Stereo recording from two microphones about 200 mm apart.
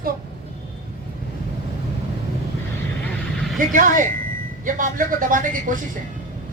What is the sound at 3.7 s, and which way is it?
Speech, 40° right (ahead or behind).